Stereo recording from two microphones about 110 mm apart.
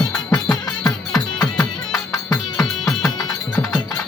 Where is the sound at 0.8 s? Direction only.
30° left (ahead or behind).